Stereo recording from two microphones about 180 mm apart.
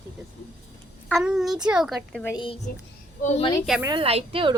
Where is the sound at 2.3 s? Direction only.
30° left (ahead or behind).